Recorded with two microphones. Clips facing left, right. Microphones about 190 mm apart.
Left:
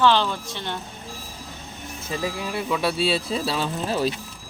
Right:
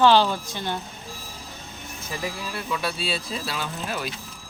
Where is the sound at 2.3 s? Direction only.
20° left (ahead or behind).